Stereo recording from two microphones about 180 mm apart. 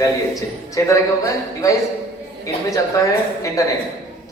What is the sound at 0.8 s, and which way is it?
Speech, 20° left (ahead or behind).